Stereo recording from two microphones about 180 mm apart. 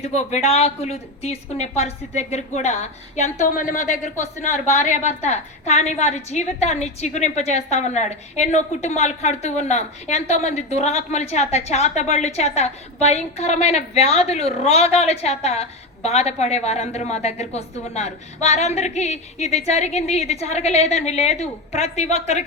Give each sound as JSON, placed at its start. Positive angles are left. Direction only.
{"t": 0.0, "sound": "a woman's voice", "side_deg": 40}